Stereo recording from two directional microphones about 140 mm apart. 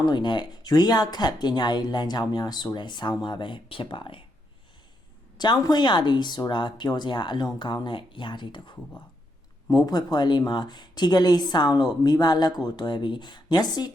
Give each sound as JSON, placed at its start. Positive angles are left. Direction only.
{"t": 0.0, "sound": "speech", "side_deg": 30}
{"t": 5.4, "sound": "speech", "side_deg": 30}